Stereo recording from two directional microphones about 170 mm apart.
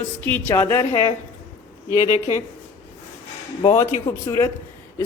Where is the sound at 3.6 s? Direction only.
15° left (ahead or behind).